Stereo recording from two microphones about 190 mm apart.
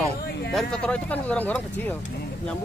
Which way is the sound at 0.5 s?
Centre (ahead or behind).